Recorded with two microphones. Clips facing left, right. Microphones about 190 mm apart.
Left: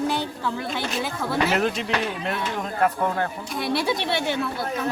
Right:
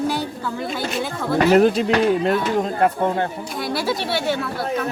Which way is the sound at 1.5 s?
35° right (ahead or behind).